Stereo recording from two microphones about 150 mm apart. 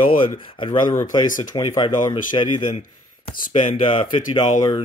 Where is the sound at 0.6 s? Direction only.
30° left (ahead or behind).